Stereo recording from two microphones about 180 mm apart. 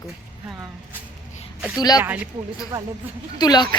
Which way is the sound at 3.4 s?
25° left (ahead or behind).